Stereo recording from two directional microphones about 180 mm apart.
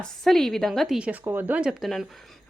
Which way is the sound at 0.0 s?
Centre (ahead or behind).